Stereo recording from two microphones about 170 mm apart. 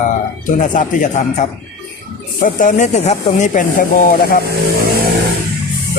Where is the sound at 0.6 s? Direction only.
50° left (ahead or behind).